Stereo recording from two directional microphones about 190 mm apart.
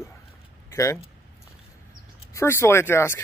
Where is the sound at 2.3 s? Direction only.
15° left (ahead or behind).